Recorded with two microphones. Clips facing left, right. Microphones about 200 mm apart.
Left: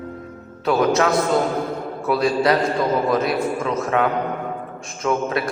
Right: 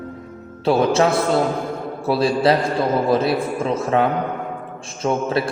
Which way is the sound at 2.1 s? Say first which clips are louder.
Right 1 dB; 30° right (ahead or behind).